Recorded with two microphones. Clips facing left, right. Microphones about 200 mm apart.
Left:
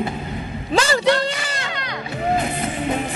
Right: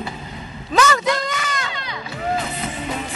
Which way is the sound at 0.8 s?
30° left (ahead or behind).